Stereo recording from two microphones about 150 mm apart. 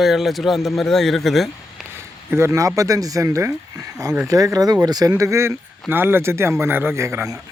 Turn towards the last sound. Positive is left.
turn(degrees=-20)  # may be behind; listen again after turning